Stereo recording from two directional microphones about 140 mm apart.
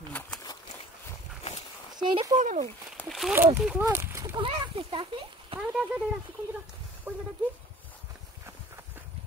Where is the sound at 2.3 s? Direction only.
55° right (ahead or behind).